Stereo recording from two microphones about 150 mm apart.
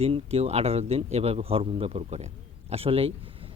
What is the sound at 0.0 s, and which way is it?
A man's voice, 40° right (ahead or behind).